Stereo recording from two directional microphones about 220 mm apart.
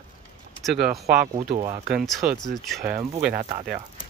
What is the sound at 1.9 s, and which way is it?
Speech, centre (ahead or behind).